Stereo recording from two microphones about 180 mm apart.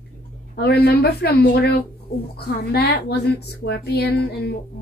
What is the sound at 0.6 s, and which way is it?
A woman's voice, 60° left (ahead or behind).